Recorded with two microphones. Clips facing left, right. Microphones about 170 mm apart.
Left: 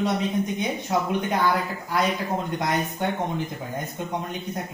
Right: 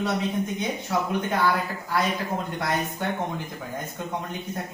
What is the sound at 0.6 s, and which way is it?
A woman's voice, 20° left (ahead or behind).